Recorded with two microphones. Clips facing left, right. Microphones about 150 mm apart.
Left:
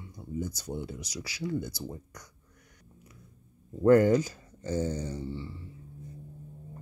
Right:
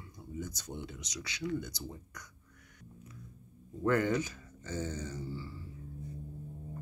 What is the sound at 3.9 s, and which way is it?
Speech, 35° left (ahead or behind).